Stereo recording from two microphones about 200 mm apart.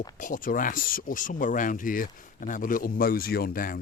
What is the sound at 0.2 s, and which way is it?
Speech, 40° left (ahead or behind).